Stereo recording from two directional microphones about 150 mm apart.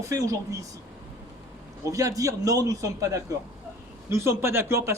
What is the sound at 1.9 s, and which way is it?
Speech, 20° right (ahead or behind).